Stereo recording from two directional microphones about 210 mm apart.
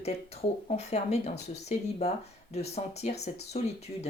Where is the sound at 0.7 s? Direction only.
30° left (ahead or behind).